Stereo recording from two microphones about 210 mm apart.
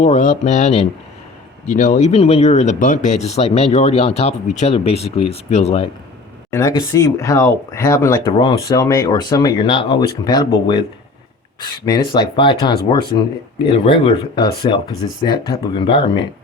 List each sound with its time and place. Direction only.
0.0 s speech: 35° left (ahead or behind)
6.5 s speech: 15° left (ahead or behind)